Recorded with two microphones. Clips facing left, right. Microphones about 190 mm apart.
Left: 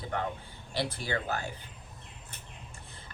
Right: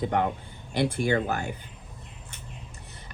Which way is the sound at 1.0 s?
55° right (ahead or behind).